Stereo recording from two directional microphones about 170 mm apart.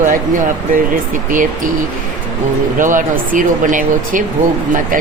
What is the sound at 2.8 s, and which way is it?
Speech, 50° right (ahead or behind).